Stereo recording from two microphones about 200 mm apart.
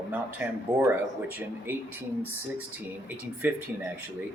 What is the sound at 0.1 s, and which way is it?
Speech, 10° right (ahead or behind).